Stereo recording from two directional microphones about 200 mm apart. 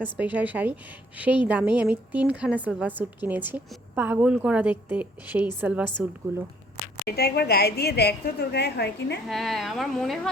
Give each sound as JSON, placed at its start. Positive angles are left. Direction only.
{"t": 0.0, "sound": "a woman's voice", "side_deg": -10}
{"t": 7.1, "sound": "a woman's voice", "side_deg": 55}
{"t": 9.2, "sound": "a woman's voice", "side_deg": 0}